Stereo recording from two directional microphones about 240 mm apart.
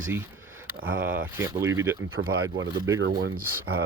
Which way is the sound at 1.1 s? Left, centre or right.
Centre.